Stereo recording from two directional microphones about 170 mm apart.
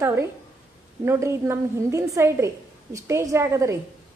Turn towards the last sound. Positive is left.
turn(degrees=-15)  # may be behind; listen again after turning